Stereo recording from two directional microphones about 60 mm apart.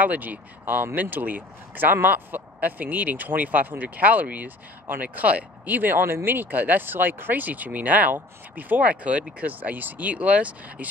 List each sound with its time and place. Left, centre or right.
0.0 s speech: right